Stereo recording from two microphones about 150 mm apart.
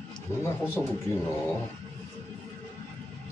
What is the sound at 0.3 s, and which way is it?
Speech, 15° left (ahead or behind).